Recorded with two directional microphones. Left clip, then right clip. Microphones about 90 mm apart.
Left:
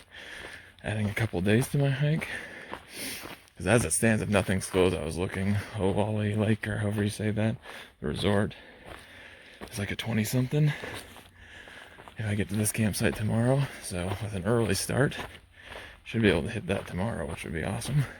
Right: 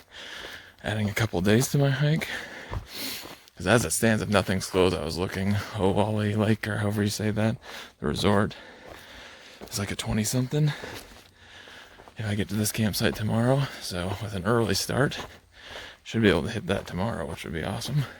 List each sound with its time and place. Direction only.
0.2 s a sound: 35° right (ahead or behind)
3.2 s speech: 35° right (ahead or behind); by 5.9 s 50° right (ahead or behind)
5.9 s speech: 90° right; by 6.9 s 50° right (ahead or behind)
7.0 s speech: 65° right (ahead or behind)
9.7 s speech: 45° right (ahead or behind)
10.1 s speech: 25° right (ahead or behind)
12.1 s speech: 30° right (ahead or behind)
12.6 s speech: 25° right (ahead or behind)
13.2 s speech: 45° right (ahead or behind)
13.7 s speech: 30° right (ahead or behind)
14.7 s speech: 20° right (ahead or behind)
16.0 s speech: 55° right (ahead or behind); by 17.2 s 40° right (ahead or behind)
17.2 s speech: 25° right (ahead or behind)